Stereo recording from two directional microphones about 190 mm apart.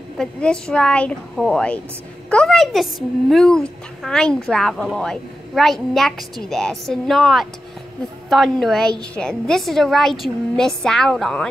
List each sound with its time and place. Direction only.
0.2 s a woman's voice: 5° left (ahead or behind)